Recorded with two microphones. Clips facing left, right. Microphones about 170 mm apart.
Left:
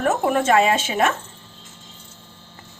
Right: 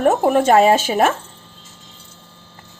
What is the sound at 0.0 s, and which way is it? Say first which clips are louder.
Speech: right 5 dB; 35° right (ahead or behind).